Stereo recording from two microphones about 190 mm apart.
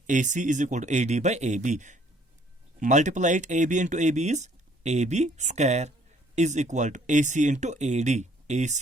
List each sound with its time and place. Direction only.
0.1 s speech: 40° right (ahead or behind)